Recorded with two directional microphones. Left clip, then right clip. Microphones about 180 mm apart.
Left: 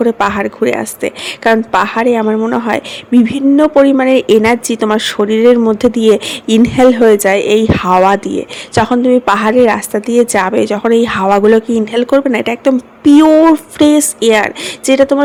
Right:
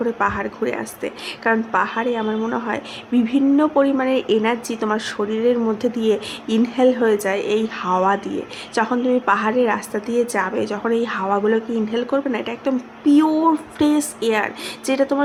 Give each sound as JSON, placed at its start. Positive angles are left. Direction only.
{"t": 0.0, "sound": "speech", "side_deg": 45}